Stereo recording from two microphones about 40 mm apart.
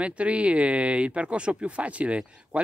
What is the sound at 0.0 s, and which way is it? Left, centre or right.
Speech, right.